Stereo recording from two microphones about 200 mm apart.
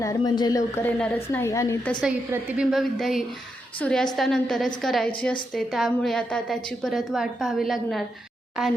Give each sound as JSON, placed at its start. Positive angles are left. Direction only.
{"t": 0.0, "sound": "a woman's voice", "side_deg": 20}
{"t": 0.9, "sound": "a woman's voice", "side_deg": 5}
{"t": 2.0, "sound": "a woman's voice", "side_deg": -5}